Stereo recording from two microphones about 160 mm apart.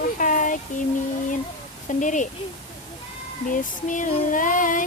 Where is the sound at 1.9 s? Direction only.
50° left (ahead or behind).